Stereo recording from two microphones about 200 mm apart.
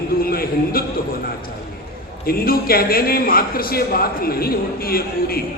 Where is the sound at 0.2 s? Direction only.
50° left (ahead or behind).